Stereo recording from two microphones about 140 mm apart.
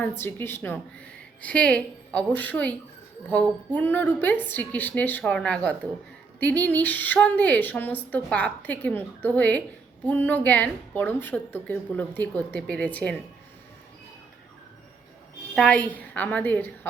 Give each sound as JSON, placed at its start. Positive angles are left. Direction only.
{"t": 0.2, "sound": "a woman's voice", "side_deg": 15}
{"t": 15.5, "sound": "a woman's voice", "side_deg": 5}